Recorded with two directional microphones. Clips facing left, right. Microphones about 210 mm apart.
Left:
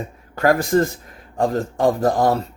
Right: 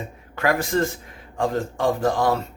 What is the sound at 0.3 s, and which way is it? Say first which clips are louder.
Speech: left 5 dB; 40° left (ahead or behind).